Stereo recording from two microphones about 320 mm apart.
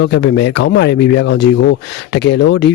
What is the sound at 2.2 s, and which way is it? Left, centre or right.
Speech, left.